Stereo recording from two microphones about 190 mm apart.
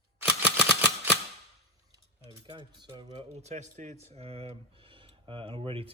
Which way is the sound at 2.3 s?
25° right (ahead or behind).